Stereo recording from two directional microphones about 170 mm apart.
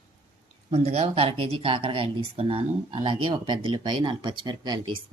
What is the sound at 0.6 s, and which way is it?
Speech, 40° right (ahead or behind).